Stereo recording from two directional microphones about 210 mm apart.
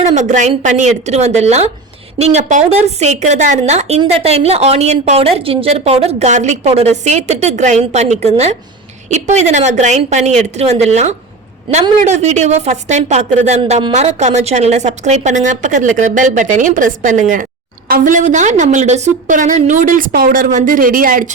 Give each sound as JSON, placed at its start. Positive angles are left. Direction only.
{"t": 0.1, "sound": "a woman's voice", "side_deg": -35}